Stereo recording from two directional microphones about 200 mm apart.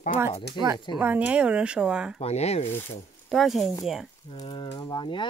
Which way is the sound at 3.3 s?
Centre (ahead or behind).